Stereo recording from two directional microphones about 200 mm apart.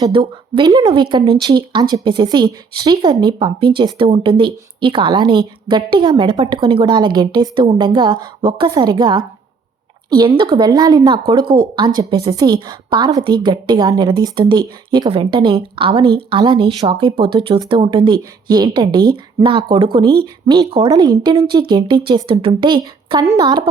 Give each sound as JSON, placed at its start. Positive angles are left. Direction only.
{"t": 0.0, "sound": "a woman's voice", "side_deg": -25}